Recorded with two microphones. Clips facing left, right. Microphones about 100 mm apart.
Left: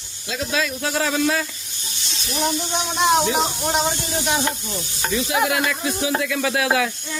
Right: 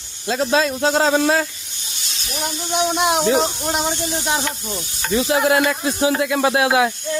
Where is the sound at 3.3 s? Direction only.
Centre (ahead or behind).